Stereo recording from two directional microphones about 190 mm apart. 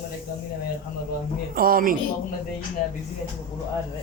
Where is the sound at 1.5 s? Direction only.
50° right (ahead or behind).